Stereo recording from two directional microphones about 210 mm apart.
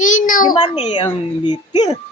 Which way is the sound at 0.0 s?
40° left (ahead or behind).